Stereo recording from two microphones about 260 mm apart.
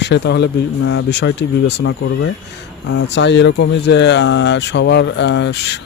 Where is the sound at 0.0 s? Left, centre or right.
Left.